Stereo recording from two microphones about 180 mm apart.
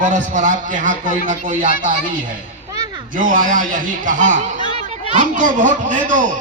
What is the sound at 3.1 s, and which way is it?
A man's voice, 50° right (ahead or behind).